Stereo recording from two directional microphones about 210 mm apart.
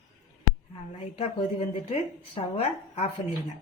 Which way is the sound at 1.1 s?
25° left (ahead or behind).